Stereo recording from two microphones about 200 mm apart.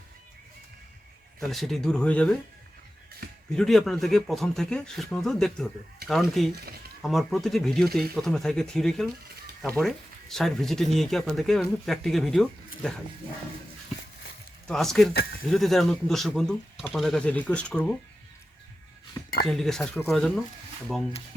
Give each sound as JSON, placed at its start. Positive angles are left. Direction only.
{"t": 1.4, "sound": "speech", "side_deg": 0}
{"t": 3.5, "sound": "speech", "side_deg": 0}
{"t": 14.7, "sound": "speech", "side_deg": 0}
{"t": 15.1, "sound": "speech", "side_deg": 50}
{"t": 15.4, "sound": "speech", "side_deg": 0}
{"t": 19.5, "sound": "speech", "side_deg": 0}